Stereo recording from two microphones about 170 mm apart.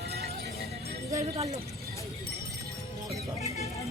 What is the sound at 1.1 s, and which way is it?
Speech, 40° right (ahead or behind).